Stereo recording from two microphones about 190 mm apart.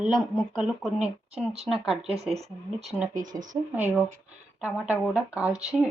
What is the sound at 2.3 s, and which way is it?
Speech, 35° right (ahead or behind).